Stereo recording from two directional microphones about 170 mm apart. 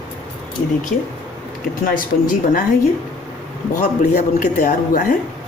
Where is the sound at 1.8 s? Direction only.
55° left (ahead or behind).